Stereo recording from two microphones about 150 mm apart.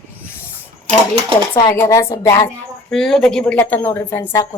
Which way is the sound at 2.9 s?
5° left (ahead or behind).